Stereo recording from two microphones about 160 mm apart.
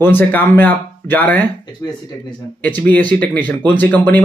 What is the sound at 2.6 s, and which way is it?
A man's voice, 10° left (ahead or behind).